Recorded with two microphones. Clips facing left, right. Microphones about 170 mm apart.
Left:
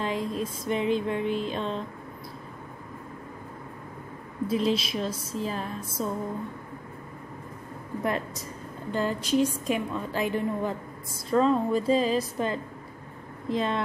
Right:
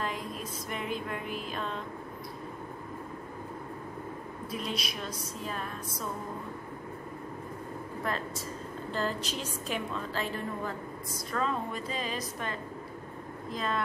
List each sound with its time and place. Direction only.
0.0 s a sound: 30° left (ahead or behind)
0.8 s a woman's voice: 30° left (ahead or behind)
4.5 s a woman's voice: 25° left (ahead or behind)
8.0 s a woman's voice: 20° left (ahead or behind)
11.2 s a woman's voice: 30° left (ahead or behind)